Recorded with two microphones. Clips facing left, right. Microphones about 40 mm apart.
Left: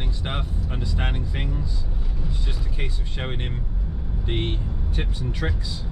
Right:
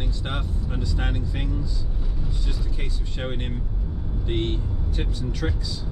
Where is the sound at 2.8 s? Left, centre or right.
Centre.